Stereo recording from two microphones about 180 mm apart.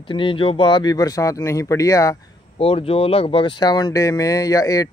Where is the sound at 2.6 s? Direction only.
35° left (ahead or behind).